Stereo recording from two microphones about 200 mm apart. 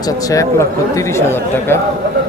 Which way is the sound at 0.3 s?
15° left (ahead or behind).